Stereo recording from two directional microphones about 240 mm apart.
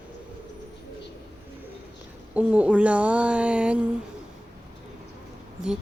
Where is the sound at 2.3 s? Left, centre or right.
Centre.